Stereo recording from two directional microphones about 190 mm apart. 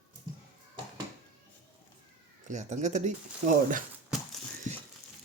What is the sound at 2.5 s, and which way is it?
Speech, 40° right (ahead or behind).